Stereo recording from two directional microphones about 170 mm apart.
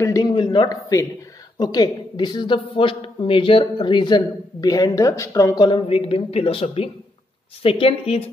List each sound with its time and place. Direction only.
0.0 s a woman's voice: 20° left (ahead or behind)